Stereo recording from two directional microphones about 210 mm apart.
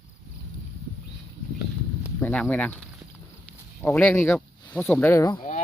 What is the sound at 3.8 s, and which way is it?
Speech, 5° left (ahead or behind).